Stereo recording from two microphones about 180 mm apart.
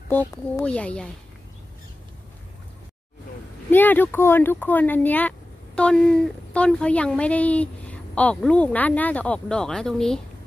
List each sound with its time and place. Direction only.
0.1 s a woman's voice: 15° left (ahead or behind)
3.7 s a woman's voice: 10° left (ahead or behind)